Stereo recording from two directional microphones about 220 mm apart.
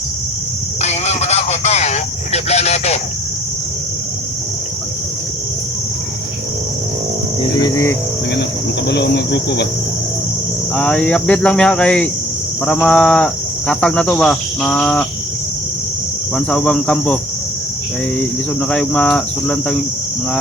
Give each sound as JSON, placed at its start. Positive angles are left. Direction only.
{"t": 0.8, "sound": "a sound", "side_deg": 30}
{"t": 7.6, "sound": "speech", "side_deg": 15}
{"t": 8.9, "sound": "cricket", "side_deg": 50}
{"t": 10.8, "sound": "cricket", "side_deg": 5}
{"t": 16.3, "sound": "cricket", "side_deg": 5}
{"t": 18.7, "sound": "cricket", "side_deg": 5}